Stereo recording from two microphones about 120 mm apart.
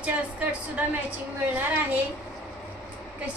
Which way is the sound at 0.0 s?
15° right (ahead or behind).